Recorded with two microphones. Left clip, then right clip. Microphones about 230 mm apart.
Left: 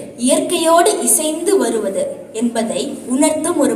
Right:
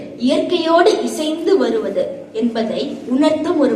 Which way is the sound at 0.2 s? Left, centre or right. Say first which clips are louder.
Left 1 dB; left.